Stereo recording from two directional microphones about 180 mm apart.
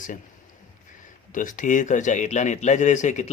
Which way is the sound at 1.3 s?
45° left (ahead or behind).